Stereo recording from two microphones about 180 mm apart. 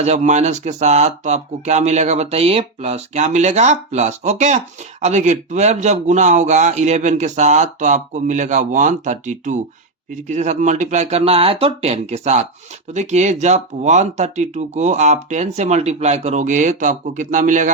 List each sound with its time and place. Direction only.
0.0 s speech: 40° right (ahead or behind)